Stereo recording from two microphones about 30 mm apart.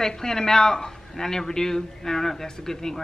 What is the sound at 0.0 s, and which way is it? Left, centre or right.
A man's voice, centre.